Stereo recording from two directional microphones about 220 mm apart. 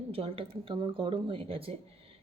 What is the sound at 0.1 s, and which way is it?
Speech, 25° right (ahead or behind).